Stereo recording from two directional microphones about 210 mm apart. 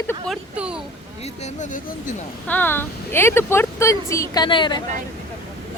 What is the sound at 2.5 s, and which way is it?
Speech, 10° left (ahead or behind).